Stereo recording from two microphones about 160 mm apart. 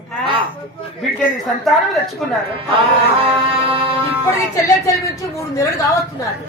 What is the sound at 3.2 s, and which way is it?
Music, 35° right (ahead or behind).